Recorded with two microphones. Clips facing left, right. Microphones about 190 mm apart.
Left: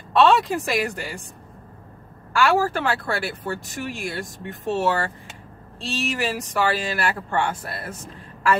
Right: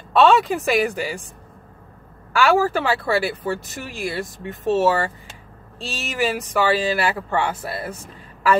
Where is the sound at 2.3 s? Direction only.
Centre (ahead or behind).